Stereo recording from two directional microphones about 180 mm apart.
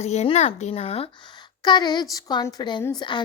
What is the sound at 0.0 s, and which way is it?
A woman's voice, 35° left (ahead or behind).